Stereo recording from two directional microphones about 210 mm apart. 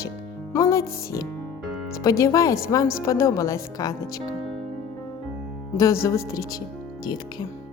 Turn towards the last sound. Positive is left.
turn(degrees=15)  # may be behind; listen again after turning